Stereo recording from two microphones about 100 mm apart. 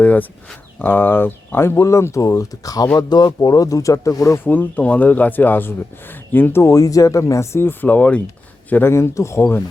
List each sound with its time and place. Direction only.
0.0 s speech: 15° left (ahead or behind); by 4.4 s 35° left (ahead or behind)
4.4 s speech: 20° left (ahead or behind)